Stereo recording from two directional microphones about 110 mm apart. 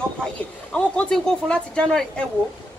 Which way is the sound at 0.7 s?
10° left (ahead or behind).